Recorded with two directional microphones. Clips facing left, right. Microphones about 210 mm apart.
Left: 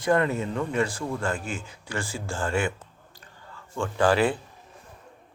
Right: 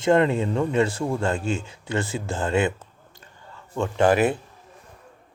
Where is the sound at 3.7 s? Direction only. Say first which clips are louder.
Right 3 dB; 20° right (ahead or behind).